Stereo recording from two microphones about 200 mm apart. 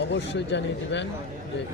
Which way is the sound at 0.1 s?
60° left (ahead or behind).